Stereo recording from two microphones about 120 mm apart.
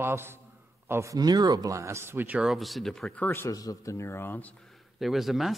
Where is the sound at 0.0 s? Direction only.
20° right (ahead or behind); by 3.3 s 5° left (ahead or behind).